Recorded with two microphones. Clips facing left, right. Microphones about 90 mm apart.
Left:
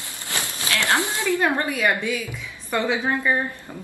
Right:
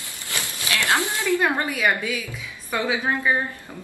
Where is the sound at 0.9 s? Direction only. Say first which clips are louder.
Left 1 dB; 20° left (ahead or behind).